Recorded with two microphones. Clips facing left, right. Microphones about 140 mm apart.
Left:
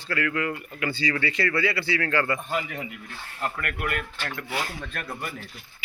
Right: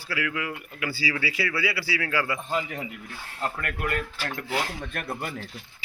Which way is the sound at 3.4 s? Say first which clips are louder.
Even; 30° right (ahead or behind).